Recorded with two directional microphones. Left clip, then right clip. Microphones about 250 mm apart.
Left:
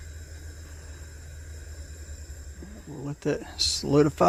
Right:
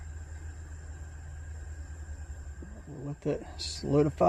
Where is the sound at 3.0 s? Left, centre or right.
Left.